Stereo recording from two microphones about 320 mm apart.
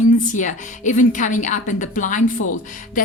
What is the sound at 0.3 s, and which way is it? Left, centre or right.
A woman's voice, left.